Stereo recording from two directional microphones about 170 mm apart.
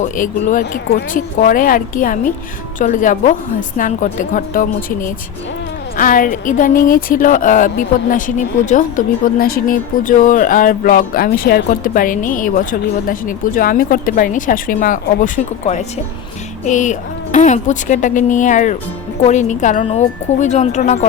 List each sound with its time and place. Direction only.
0.0 s speech: 50° left (ahead or behind)
0.6 s a woman's voice: 65° left (ahead or behind); by 21.1 s 45° left (ahead or behind)